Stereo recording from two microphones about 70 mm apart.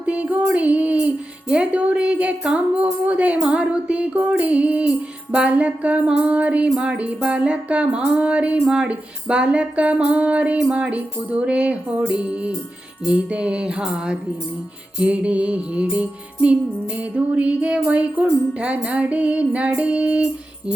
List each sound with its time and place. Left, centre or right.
0.0 s music: centre